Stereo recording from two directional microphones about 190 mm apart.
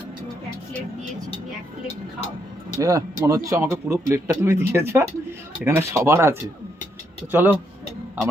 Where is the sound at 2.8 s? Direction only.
15° right (ahead or behind).